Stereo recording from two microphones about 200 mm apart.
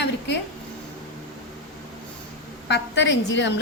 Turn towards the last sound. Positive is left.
turn(degrees=65)  # may be behind; listen again after turning